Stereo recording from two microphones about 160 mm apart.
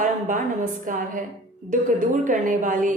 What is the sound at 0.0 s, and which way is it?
A woman's voice, 55° right (ahead or behind).